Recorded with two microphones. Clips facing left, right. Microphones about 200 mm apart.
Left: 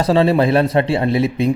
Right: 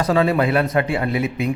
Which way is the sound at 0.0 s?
30° left (ahead or behind).